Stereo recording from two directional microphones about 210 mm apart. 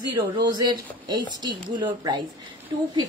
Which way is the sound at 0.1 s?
20° right (ahead or behind).